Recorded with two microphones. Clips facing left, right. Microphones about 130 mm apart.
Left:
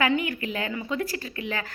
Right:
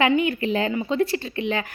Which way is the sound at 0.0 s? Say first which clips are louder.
Right 5 dB; 25° right (ahead or behind).